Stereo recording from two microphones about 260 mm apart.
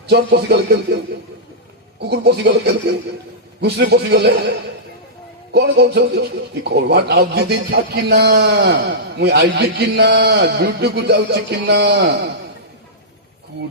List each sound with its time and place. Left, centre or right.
0.1 s a man's voice: right
2.0 s a man's voice: right
5.5 s a man's voice: right